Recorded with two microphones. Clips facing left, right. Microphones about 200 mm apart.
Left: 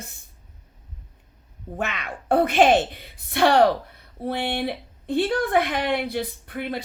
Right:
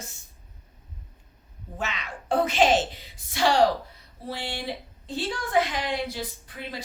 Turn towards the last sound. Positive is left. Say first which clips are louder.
# left 8 dB
turn(degrees=60)  # may be behind; listen again after turning